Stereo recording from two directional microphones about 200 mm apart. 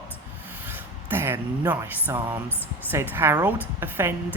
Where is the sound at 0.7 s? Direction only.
10° right (ahead or behind).